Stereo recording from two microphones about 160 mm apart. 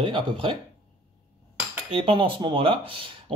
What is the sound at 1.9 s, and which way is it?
Speech, 35° right (ahead or behind).